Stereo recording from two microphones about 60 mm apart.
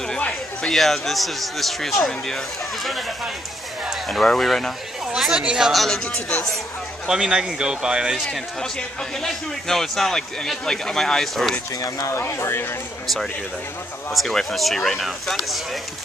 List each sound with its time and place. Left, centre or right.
0.6 s speech: centre
4.1 s speech: centre
5.1 s a woman's voice: centre
5.4 s speech: centre
5.7 s speech: centre
7.1 s speech: centre
9.2 s speech: centre
12.1 s speech: left
13.0 s speech: centre